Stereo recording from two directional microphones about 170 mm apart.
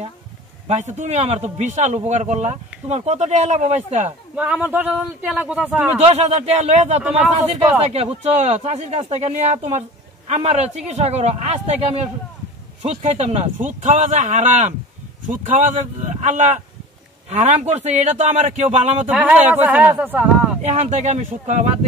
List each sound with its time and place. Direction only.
0.7 s a man's voice: 45° right (ahead or behind)
4.4 s a man's voice: 5° right (ahead or behind)
6.0 s a man's voice: 40° right (ahead or behind)
19.0 s a man's voice: 5° right (ahead or behind)
20.6 s speech: 40° right (ahead or behind)